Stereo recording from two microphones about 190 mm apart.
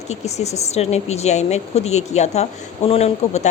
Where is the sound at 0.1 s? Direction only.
35° left (ahead or behind).